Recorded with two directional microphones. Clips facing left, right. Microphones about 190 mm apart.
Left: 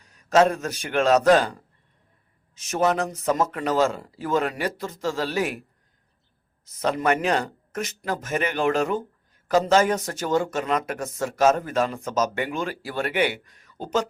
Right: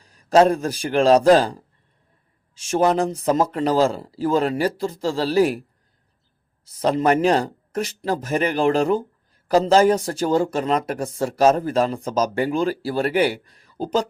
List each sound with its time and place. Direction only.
0.0 s speech: 30° right (ahead or behind)
6.7 s speech: 35° right (ahead or behind)